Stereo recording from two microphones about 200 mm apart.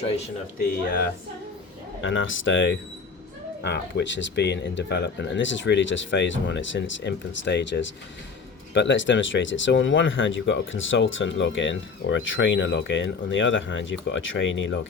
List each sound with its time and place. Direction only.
2.0 s speech: 75° left (ahead or behind)
3.6 s speech: 60° left (ahead or behind)